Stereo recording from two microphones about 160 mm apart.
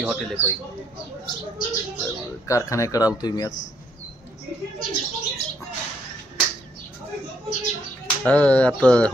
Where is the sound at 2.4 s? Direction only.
20° left (ahead or behind).